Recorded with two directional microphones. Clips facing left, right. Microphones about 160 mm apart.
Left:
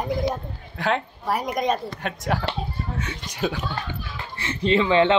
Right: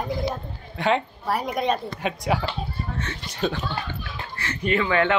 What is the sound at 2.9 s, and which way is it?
Speech, 10° left (ahead or behind).